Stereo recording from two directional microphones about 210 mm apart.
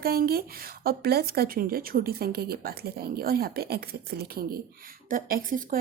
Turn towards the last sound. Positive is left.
turn(degrees=-40)  # may be behind; listen again after turning